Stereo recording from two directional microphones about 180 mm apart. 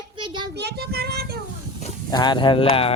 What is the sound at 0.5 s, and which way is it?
Child singing, 65° right (ahead or behind).